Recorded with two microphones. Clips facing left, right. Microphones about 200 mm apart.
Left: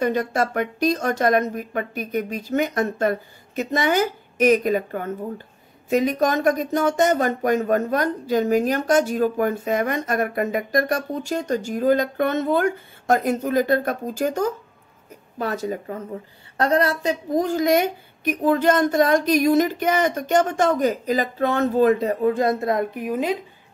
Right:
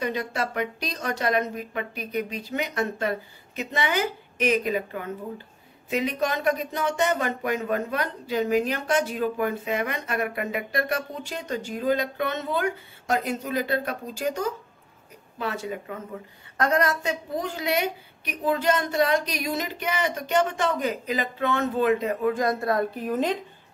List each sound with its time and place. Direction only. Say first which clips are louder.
0.0 s speech: left 7 dB; 45° left (ahead or behind); by 23.3 s 10° left (ahead or behind)